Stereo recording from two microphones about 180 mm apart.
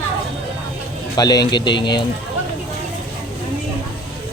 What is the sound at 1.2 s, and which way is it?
Speech, 20° left (ahead or behind).